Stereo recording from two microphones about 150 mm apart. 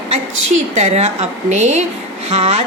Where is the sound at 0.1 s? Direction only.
45° right (ahead or behind).